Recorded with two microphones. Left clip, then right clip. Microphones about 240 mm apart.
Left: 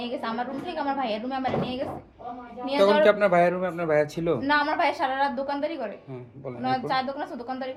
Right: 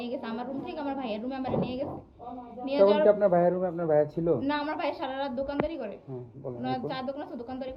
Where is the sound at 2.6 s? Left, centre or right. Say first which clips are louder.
Left 2 dB; left.